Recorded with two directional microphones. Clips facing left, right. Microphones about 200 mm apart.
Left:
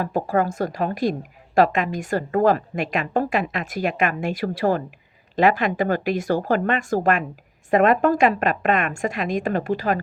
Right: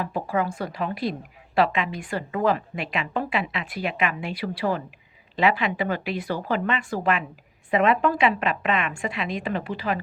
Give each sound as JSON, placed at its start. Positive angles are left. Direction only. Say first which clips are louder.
{"t": 0.0, "sound": "a woman's voice", "louder": "left 4 dB", "side_deg": 45}